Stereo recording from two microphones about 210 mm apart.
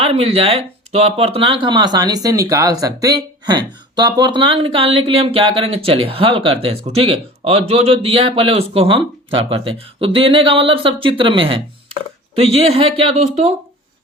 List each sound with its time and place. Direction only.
0.0 s speech: 25° right (ahead or behind)